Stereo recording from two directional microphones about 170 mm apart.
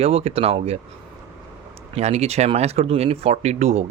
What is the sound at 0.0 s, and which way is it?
Speech, 35° right (ahead or behind).